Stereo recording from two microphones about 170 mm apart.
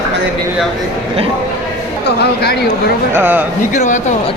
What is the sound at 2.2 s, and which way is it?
Speech, 75° left (ahead or behind).